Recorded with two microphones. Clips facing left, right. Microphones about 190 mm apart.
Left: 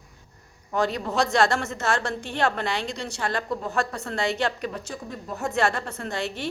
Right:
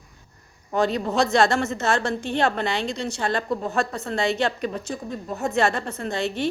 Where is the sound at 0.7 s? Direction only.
25° right (ahead or behind).